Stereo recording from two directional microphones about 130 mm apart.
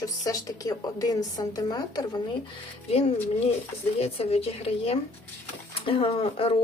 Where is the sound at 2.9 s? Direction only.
45° left (ahead or behind).